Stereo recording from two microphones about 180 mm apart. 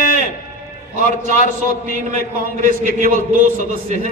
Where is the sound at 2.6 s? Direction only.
45° right (ahead or behind).